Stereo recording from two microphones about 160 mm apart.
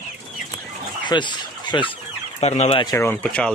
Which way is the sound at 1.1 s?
25° left (ahead or behind).